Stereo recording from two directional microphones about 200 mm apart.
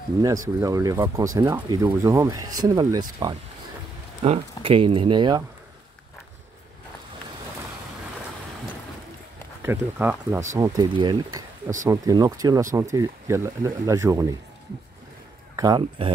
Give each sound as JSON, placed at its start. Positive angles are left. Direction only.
{"t": 0.2, "sound": "speech", "side_deg": -15}
{"t": 9.6, "sound": "speech", "side_deg": -10}
{"t": 10.6, "sound": "speech", "side_deg": -20}
{"t": 15.5, "sound": "speech", "side_deg": -20}